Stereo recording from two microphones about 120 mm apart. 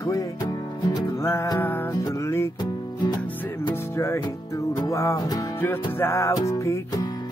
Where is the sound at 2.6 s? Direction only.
35° left (ahead or behind).